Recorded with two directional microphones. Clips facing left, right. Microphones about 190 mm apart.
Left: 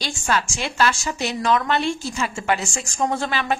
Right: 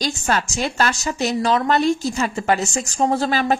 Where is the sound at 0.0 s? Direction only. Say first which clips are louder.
Right 2 dB; 45° right (ahead or behind).